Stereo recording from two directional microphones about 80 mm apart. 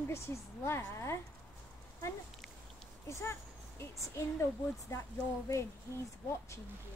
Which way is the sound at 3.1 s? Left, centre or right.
Left.